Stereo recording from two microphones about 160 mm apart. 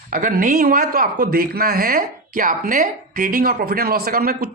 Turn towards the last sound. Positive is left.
turn(degrees=-70)  # may be behind; listen again after turning